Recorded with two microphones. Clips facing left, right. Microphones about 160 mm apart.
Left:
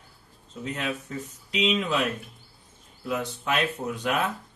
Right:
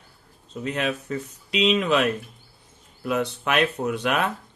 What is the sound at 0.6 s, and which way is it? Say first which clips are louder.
Speech: right 5 dB; 75° right (ahead or behind).